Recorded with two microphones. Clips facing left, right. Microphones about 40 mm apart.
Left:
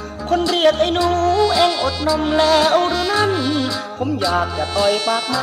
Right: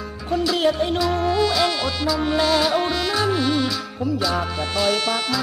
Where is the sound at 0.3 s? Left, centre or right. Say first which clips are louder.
Left 5 dB; left.